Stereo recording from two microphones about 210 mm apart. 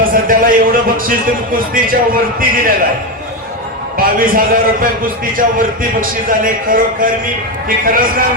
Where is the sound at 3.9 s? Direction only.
40° right (ahead or behind).